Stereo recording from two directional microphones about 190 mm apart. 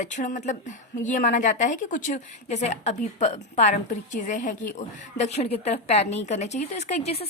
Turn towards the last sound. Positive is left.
turn(degrees=35)  # may be behind; listen again after turning